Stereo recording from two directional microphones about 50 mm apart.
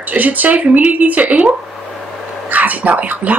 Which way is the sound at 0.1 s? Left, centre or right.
Right.